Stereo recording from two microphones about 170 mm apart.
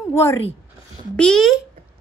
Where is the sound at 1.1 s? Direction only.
5° left (ahead or behind).